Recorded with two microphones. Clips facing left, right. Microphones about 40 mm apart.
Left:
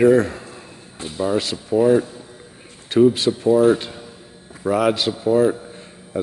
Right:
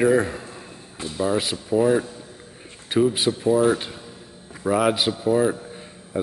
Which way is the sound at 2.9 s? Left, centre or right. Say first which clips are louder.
Left 5 dB; centre.